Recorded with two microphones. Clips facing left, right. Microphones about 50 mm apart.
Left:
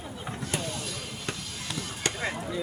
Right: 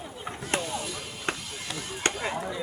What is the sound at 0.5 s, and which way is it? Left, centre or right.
Basketball bounce, right.